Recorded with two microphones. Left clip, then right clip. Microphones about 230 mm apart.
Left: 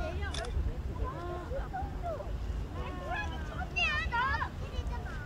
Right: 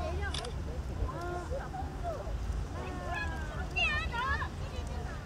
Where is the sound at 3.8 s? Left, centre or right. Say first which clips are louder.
Left 1 dB; centre.